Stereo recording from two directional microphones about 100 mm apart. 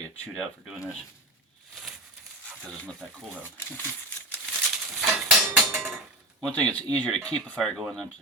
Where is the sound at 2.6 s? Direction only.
10° left (ahead or behind).